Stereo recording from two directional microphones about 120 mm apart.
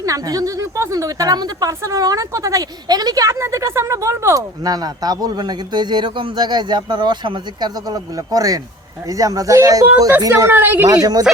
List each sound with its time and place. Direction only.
0.0 s a woman's voice: 30° right (ahead or behind)
10.5 s speech: 15° right (ahead or behind)
10.8 s a woman's voice: 30° right (ahead or behind)